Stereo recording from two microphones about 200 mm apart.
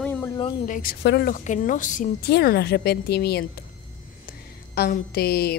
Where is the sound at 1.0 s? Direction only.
55° left (ahead or behind).